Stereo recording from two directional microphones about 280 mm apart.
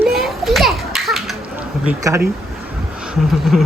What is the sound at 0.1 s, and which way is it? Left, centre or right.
Children playing, centre.